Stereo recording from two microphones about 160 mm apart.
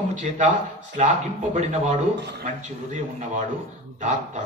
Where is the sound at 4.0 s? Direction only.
50° right (ahead or behind).